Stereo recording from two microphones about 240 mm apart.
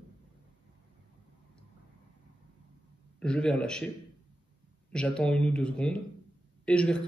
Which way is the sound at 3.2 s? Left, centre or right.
Centre.